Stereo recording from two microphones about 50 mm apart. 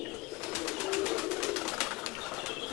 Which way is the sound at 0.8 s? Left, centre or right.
Centre.